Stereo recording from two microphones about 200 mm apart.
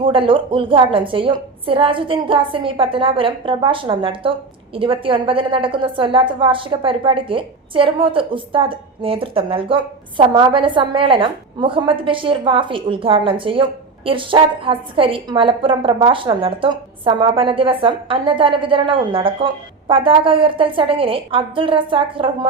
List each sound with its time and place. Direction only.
0.0 s a woman's voice: 25° right (ahead or behind)